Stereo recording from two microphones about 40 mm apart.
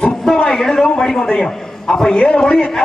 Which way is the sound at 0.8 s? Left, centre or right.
Centre.